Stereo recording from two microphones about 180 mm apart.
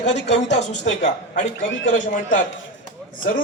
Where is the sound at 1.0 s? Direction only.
40° left (ahead or behind).